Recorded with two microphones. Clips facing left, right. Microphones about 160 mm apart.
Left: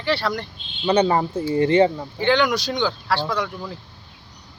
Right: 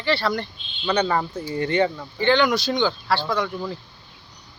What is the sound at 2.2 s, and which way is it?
Speech, 5° left (ahead or behind).